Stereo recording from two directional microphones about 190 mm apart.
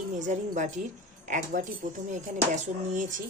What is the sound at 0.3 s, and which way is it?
A woman's voice, 40° right (ahead or behind).